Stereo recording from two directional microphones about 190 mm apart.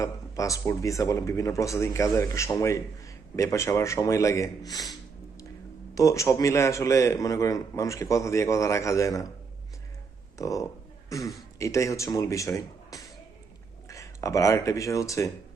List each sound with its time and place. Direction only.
0.0 s a man's voice: 15° left (ahead or behind)
5.9 s a man's voice: 15° left (ahead or behind)
10.3 s a man's voice: 15° left (ahead or behind)